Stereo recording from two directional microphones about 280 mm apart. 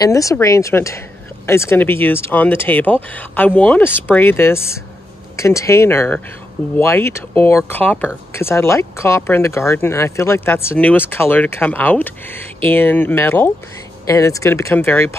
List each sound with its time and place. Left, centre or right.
0.0 s speech: centre